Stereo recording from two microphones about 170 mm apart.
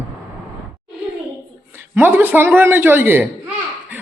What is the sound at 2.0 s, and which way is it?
A woman's voice, 10° right (ahead or behind).